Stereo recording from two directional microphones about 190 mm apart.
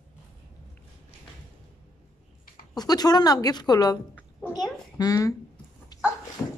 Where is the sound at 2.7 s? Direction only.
20° left (ahead or behind).